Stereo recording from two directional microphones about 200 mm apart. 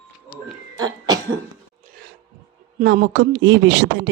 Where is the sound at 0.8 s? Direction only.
20° right (ahead or behind).